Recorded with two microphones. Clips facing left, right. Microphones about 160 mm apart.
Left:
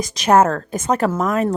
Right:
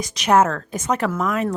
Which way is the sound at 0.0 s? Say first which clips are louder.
Left 3 dB; 40° left (ahead or behind).